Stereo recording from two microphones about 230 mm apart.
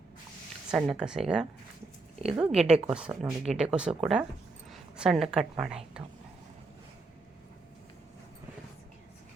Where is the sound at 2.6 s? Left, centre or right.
Right.